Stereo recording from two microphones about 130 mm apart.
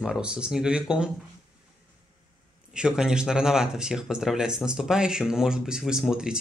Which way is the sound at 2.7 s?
5° right (ahead or behind).